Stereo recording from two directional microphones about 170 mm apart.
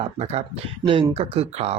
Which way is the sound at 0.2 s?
40° right (ahead or behind).